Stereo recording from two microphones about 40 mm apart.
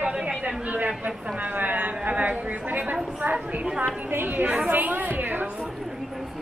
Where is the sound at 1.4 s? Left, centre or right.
Right.